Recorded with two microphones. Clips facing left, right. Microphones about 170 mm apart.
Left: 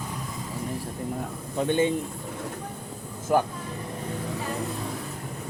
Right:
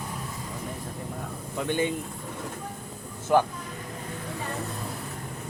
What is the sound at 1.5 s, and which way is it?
Speech, 25° left (ahead or behind).